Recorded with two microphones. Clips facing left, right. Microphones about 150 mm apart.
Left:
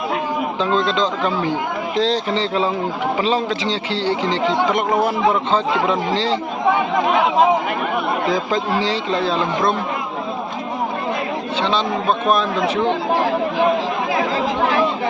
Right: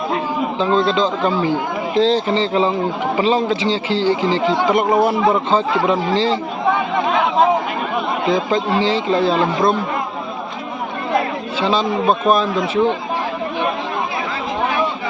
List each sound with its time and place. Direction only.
0.6 s a man's voice: 5° right (ahead or behind)
8.3 s a man's voice: centre (ahead or behind)
11.6 s a man's voice: 5° right (ahead or behind)
14.2 s chatter: 80° left